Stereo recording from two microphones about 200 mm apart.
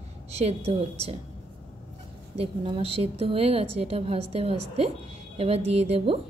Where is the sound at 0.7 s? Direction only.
30° right (ahead or behind).